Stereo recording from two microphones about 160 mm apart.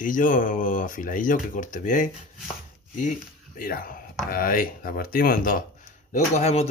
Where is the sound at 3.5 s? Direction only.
65° left (ahead or behind).